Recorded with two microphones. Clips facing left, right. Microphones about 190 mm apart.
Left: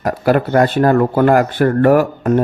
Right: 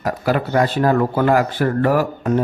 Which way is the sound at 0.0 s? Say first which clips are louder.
Left 5 dB; 55° left (ahead or behind).